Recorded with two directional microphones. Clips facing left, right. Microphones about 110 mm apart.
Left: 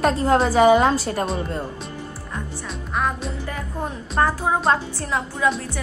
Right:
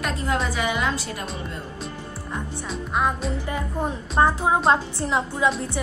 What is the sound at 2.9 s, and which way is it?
Music, 20° right (ahead or behind).